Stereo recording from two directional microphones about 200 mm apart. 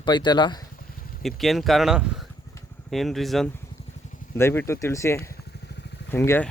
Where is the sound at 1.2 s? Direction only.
Centre (ahead or behind).